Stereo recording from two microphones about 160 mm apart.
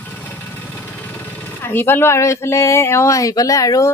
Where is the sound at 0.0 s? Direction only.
10° left (ahead or behind).